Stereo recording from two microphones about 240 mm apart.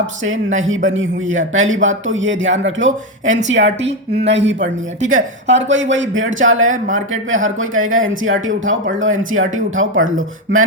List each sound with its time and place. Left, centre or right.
0.2 s speech: right
3.8 s speech: right
4.3 s speech: right